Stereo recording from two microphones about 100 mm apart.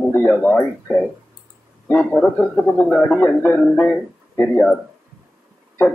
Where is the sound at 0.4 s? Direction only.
15° left (ahead or behind).